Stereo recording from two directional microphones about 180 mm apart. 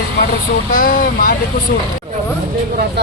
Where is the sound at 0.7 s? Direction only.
50° left (ahead or behind).